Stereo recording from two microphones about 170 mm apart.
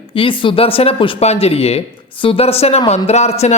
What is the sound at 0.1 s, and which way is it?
Speech, 30° left (ahead or behind).